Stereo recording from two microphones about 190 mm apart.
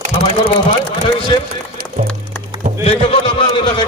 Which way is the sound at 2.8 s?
30° left (ahead or behind).